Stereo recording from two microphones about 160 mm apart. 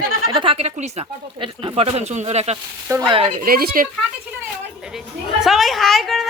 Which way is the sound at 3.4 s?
65° right (ahead or behind).